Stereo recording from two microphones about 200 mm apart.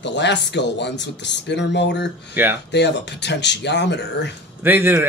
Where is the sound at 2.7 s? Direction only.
60° left (ahead or behind).